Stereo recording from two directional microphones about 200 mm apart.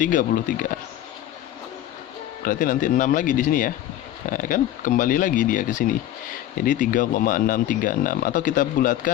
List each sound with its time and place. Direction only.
0.0 s speech: 40° left (ahead or behind)
2.4 s speech: 40° left (ahead or behind)